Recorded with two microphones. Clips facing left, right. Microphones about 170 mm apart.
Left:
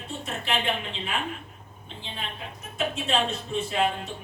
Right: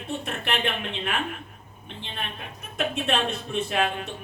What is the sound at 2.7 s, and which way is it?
A woman's voice, 65° right (ahead or behind).